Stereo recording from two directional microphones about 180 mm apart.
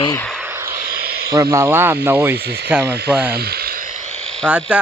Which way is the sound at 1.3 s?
15° right (ahead or behind).